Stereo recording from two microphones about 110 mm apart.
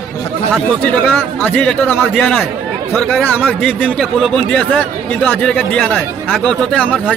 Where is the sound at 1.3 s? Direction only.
15° left (ahead or behind).